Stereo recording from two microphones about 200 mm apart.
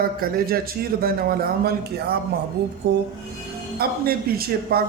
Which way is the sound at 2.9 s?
55° right (ahead or behind).